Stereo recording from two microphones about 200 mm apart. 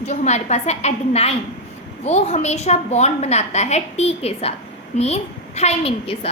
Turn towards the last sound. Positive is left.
turn(degrees=30)  # may be behind; listen again after turning